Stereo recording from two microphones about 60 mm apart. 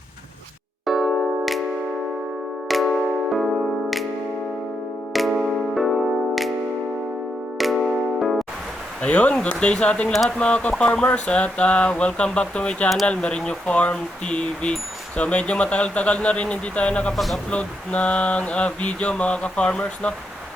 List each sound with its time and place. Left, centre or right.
0.9 s music: centre
2.6 s music: centre
5.3 s music: centre
5.7 s music: centre
7.6 s music: centre
9.0 s speech: centre
17.2 s speech: centre
17.5 s speech: centre